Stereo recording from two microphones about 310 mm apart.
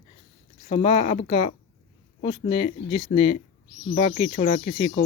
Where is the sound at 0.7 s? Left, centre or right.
Centre.